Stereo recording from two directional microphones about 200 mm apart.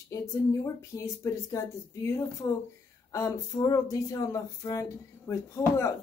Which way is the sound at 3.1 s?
15° left (ahead or behind).